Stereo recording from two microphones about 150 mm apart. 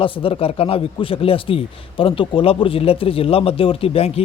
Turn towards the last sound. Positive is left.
turn(degrees=40)  # may be behind; listen again after turning